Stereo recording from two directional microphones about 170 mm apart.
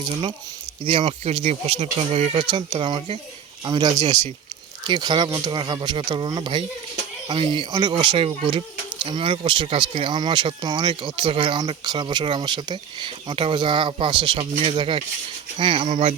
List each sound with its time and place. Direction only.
0.9 s speech: 35° right (ahead or behind)